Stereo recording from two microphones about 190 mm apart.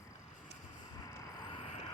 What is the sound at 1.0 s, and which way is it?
Vehicle, 25° left (ahead or behind).